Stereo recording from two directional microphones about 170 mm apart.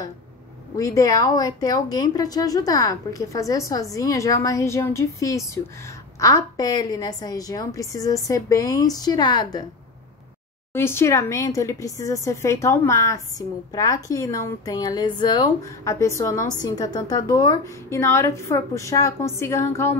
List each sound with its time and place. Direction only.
0.7 s speech: 20° left (ahead or behind)
10.7 s a woman's voice: 15° left (ahead or behind)